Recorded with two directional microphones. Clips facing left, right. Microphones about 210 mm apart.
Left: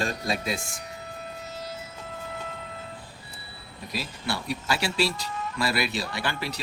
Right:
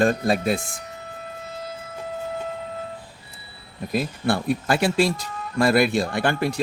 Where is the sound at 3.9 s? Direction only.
50° right (ahead or behind).